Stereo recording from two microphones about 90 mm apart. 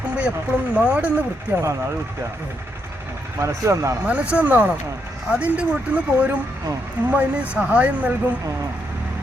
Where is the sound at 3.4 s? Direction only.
35° right (ahead or behind).